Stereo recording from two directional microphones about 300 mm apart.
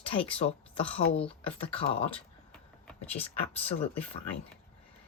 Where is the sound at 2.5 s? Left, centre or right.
Centre.